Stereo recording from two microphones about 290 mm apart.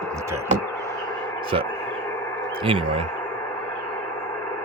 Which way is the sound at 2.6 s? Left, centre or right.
Centre.